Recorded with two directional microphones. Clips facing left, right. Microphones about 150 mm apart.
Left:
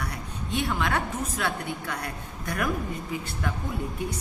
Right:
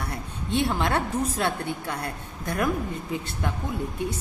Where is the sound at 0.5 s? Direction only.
30° right (ahead or behind).